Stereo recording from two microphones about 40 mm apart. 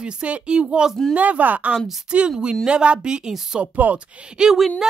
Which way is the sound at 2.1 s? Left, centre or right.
Right.